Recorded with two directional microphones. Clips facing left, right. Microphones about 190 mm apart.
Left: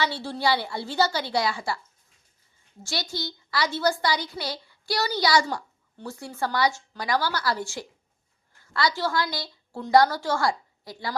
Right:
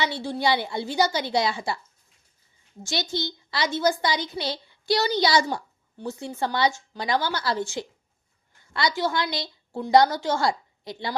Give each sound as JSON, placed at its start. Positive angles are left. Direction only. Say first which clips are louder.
{"t": 0.0, "sound": "a child's voice", "louder": "right 1 dB", "side_deg": -15}
{"t": 2.8, "sound": "a child's voice", "louder": "right 3 dB", "side_deg": -20}